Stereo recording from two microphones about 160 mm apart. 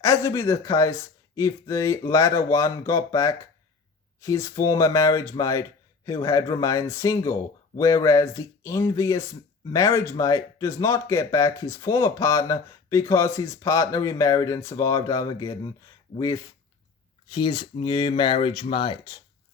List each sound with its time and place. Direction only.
0.0 s speech: 20° left (ahead or behind)